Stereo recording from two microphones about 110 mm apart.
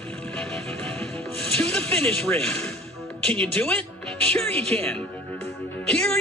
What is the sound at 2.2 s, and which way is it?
Speech, 15° left (ahead or behind).